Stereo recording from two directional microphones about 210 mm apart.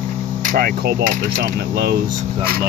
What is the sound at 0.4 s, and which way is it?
Mains hum, 40° right (ahead or behind).